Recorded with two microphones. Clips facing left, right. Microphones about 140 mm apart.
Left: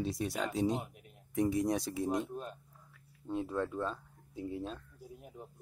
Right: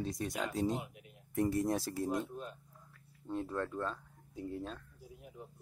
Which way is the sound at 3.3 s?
10° left (ahead or behind).